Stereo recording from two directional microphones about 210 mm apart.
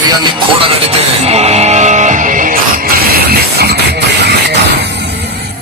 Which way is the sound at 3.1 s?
50° right (ahead or behind).